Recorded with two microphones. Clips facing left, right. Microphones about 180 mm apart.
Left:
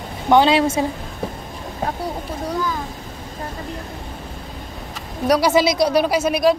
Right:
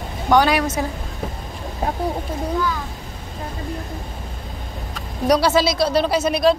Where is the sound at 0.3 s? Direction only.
25° left (ahead or behind).